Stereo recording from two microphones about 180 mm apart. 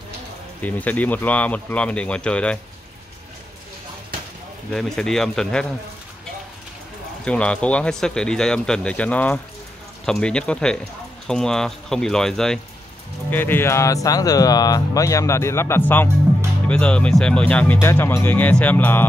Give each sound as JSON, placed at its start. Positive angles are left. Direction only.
{"t": 0.6, "sound": "speech", "side_deg": 10}
{"t": 4.7, "sound": "speech", "side_deg": 5}
{"t": 7.2, "sound": "speech", "side_deg": 5}